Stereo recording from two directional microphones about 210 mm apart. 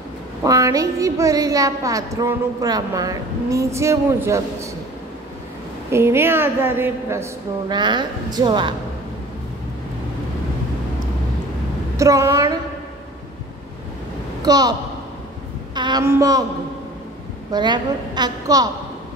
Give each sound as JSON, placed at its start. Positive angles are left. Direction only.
{"t": 0.4, "sound": "a woman's voice", "side_deg": -15}
{"t": 5.9, "sound": "a woman's voice", "side_deg": -10}
{"t": 12.0, "sound": "a woman's voice", "side_deg": -15}
{"t": 14.4, "sound": "a woman's voice", "side_deg": -20}
{"t": 17.5, "sound": "a woman's voice", "side_deg": -20}